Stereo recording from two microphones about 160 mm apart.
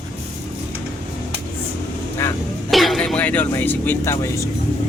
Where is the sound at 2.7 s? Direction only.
Centre (ahead or behind).